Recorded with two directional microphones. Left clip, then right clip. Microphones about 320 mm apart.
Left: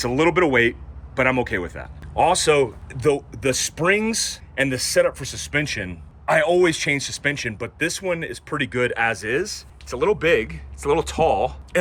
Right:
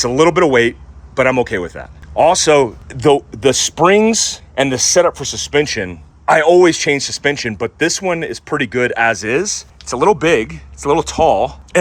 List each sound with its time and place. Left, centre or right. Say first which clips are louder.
0.0 s speech: right 7 dB; centre
2.9 s speech: right 9 dB; right
3.6 s speech: right 10 dB; centre